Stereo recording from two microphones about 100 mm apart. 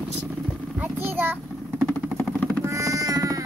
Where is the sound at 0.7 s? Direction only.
20° right (ahead or behind).